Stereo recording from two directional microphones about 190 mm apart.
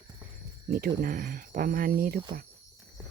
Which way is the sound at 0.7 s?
45° right (ahead or behind).